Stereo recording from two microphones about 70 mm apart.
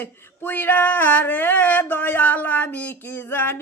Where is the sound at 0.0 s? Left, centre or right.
Left.